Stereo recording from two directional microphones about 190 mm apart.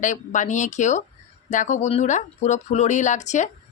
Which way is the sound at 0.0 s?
40° left (ahead or behind).